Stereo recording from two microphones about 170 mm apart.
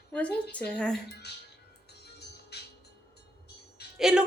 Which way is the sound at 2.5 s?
75° left (ahead or behind).